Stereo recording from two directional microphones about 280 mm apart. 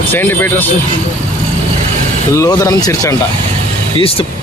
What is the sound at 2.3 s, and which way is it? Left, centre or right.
Speech, centre.